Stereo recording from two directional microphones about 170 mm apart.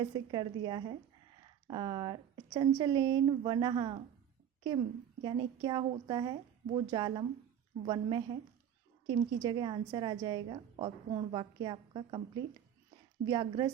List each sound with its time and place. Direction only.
0.0 s a woman's voice: 25° right (ahead or behind)
5.2 s a woman's voice: 25° right (ahead or behind)
13.2 s a woman's voice: 25° right (ahead or behind)